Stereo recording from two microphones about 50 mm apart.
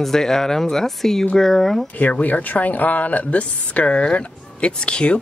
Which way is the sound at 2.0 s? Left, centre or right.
Left.